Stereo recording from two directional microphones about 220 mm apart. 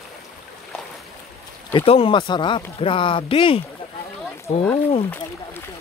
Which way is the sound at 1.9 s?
25° left (ahead or behind).